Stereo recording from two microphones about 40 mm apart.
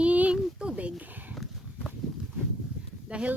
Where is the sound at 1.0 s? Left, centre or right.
Right.